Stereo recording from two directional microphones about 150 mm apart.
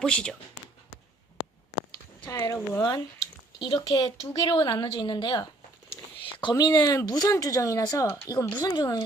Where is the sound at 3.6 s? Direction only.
30° left (ahead or behind).